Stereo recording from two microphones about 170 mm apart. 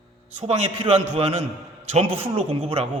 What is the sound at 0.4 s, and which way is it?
A man's voice, 35° right (ahead or behind).